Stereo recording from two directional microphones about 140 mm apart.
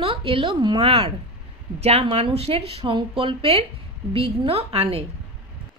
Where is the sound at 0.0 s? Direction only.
40° right (ahead or behind).